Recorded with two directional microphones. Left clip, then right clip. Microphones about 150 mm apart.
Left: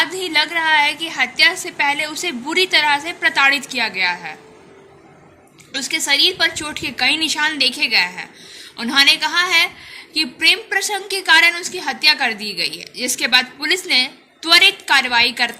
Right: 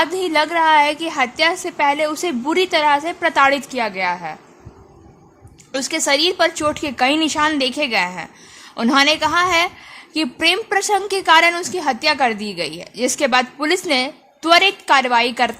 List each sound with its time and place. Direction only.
0.0 s a woman's voice: 50° right (ahead or behind)
5.7 s a woman's voice: 55° right (ahead or behind)